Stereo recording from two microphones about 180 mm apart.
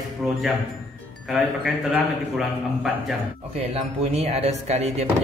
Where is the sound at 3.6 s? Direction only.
35° right (ahead or behind).